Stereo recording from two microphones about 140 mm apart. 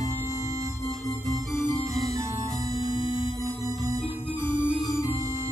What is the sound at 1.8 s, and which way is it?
Music, 25° right (ahead or behind).